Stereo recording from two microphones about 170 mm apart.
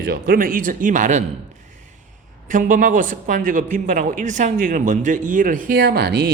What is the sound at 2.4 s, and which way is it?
Speech, 50° right (ahead or behind).